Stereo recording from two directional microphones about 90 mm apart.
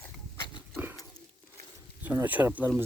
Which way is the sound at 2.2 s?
20° right (ahead or behind).